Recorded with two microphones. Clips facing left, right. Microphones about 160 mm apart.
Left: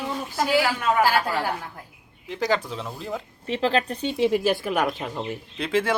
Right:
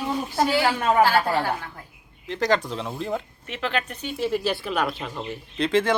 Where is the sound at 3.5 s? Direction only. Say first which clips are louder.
Left 5 dB; 35° left (ahead or behind).